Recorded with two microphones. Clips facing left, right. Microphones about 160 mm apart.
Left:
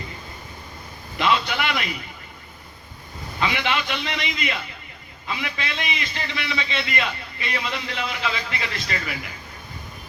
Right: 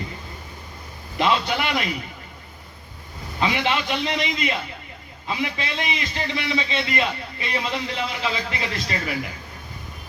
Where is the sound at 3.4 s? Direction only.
35° right (ahead or behind).